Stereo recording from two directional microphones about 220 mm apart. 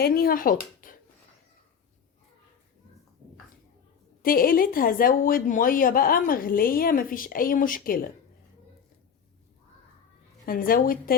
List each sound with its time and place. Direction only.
0.0 s speech: 40° left (ahead or behind)
4.2 s a woman's voice: 40° left (ahead or behind)
10.4 s a woman's voice: 40° left (ahead or behind)